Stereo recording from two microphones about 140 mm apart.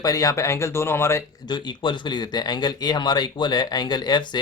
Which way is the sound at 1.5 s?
30° left (ahead or behind).